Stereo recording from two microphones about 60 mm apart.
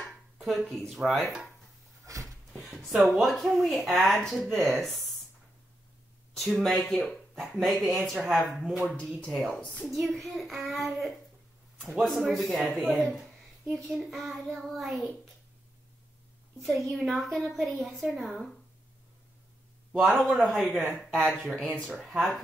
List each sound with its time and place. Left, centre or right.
0.0 s speech: centre
2.1 s a sound: right
2.7 s speech: centre
6.3 s speech: centre
9.5 s a woman's voice: left
9.8 s speech: centre
16.6 s speech: centre
20.1 s speech: centre